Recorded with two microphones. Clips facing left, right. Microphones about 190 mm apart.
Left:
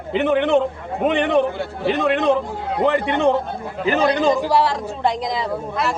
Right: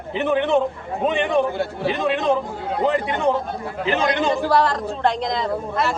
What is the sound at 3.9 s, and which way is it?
Speech, 35° left (ahead or behind).